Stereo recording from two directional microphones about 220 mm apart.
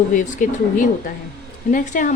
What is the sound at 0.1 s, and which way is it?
A woman's voice, 35° left (ahead or behind).